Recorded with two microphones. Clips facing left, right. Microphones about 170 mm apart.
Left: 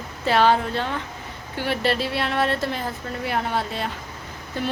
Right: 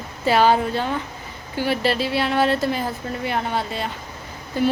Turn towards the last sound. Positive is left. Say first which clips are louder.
# right 7 dB
turn(degrees=-5)  # may be behind; listen again after turning